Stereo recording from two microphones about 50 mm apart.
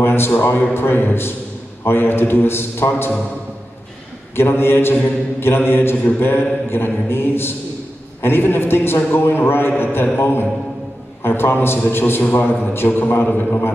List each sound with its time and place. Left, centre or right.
0.0 s a man's voice: left
4.4 s a man's voice: left